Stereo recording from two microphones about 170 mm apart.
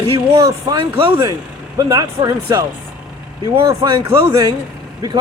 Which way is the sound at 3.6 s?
20° right (ahead or behind).